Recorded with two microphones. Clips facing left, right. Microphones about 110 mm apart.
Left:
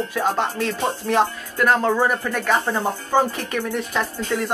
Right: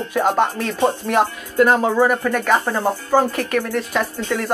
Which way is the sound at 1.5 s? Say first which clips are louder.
Right 3 dB; 20° right (ahead or behind).